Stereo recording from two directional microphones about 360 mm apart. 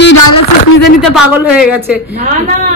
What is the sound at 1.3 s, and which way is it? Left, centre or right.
Speech, centre.